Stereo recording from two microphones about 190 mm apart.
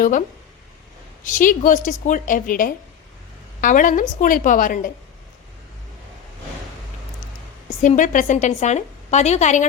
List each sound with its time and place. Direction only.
0.0 s a woman's voice: 45° left (ahead or behind)
7.8 s a woman's voice: 40° left (ahead or behind)